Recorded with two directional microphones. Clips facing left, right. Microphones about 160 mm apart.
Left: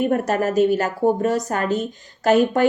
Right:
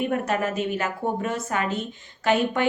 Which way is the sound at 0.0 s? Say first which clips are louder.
Left 5 dB; 40° left (ahead or behind).